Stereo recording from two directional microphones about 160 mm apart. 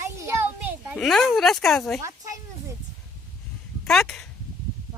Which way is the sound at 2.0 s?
20° right (ahead or behind).